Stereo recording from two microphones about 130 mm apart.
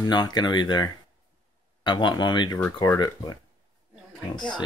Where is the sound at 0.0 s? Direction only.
35° left (ahead or behind).